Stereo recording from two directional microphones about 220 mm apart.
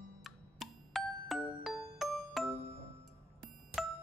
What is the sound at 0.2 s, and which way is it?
Music, centre (ahead or behind).